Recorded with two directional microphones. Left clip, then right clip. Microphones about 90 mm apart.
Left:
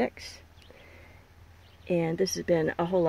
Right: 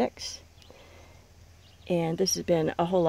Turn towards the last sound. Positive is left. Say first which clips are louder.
# right 1 dB
turn(degrees=-30)  # may be behind; listen again after turning